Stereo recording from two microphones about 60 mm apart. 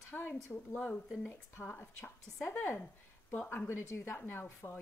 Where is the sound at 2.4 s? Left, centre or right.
Left.